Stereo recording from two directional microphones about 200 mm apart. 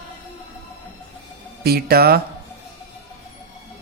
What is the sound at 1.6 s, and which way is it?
Speech, 50° right (ahead or behind).